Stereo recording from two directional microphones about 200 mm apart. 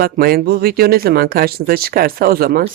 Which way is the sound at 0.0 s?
50° right (ahead or behind).